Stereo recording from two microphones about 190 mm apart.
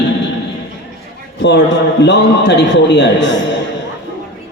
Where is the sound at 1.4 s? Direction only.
65° left (ahead or behind).